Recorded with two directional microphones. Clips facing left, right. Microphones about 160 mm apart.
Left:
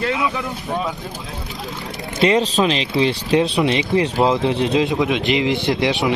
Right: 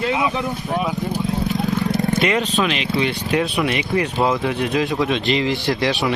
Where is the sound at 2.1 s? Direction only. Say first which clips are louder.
Left 7 dB; 30° left (ahead or behind).